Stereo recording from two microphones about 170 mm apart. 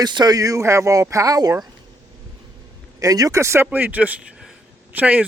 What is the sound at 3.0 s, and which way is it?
A man's voice, 20° right (ahead or behind).